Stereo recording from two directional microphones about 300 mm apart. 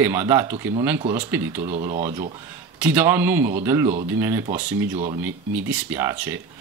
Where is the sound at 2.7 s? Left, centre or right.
Centre.